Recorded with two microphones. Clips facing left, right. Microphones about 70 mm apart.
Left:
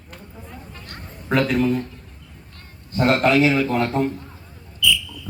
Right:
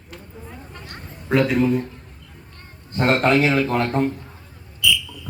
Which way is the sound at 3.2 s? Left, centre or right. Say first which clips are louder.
Even; right.